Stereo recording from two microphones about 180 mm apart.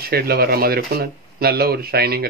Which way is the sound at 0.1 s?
60° right (ahead or behind).